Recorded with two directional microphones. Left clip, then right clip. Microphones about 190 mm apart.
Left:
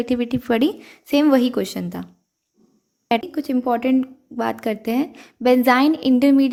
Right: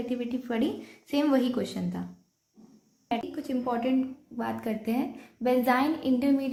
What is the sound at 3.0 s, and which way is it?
A woman's voice, 55° left (ahead or behind).